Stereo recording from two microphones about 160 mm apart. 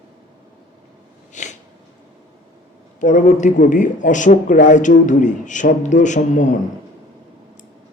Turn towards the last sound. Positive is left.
turn(degrees=50)  # may be behind; listen again after turning